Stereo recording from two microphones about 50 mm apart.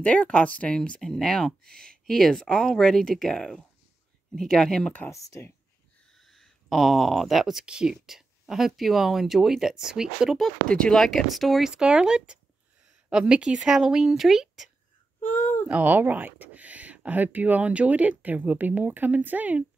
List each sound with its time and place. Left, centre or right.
0.0 s speech: left
1.0 s speech: centre
5.1 s speech: left
6.1 s speech: centre
10.7 s speech: centre
11.1 s speech: centre
11.6 s speech: centre
15.7 s speech: right